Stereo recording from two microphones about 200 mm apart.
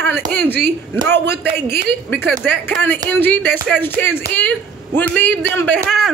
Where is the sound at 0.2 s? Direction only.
55° right (ahead or behind).